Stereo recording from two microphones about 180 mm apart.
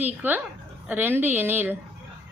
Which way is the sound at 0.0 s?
10° right (ahead or behind).